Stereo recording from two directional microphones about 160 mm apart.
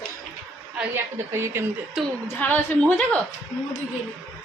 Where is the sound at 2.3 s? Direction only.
10° left (ahead or behind).